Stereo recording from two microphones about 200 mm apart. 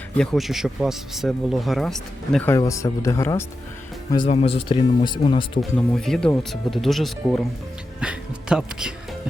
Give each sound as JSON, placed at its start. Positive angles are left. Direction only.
{"t": 0.2, "sound": "speech", "side_deg": 0}
{"t": 4.3, "sound": "speech", "side_deg": 30}
{"t": 5.7, "sound": "speech", "side_deg": 5}